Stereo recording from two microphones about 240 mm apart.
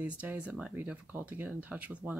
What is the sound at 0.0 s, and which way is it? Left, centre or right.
Speech, centre.